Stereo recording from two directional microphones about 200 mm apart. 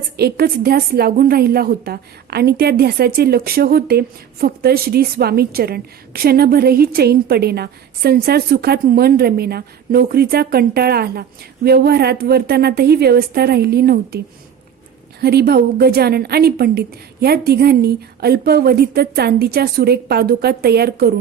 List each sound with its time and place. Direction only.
0.2 s a woman's voice: 50° right (ahead or behind)
15.2 s a woman's voice: 50° right (ahead or behind)